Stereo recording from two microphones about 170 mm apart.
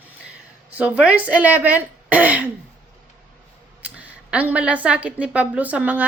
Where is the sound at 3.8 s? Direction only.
10° right (ahead or behind).